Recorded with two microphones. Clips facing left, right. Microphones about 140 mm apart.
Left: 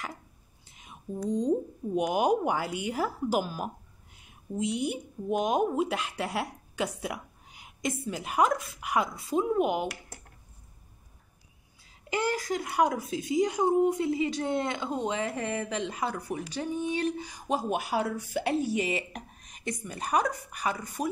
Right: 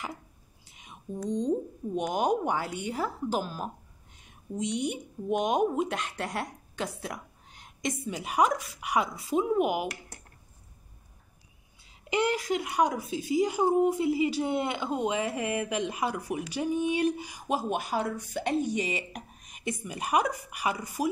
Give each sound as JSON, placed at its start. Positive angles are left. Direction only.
{"t": 0.7, "sound": "a woman's voice", "side_deg": 0}
{"t": 12.2, "sound": "speech", "side_deg": -5}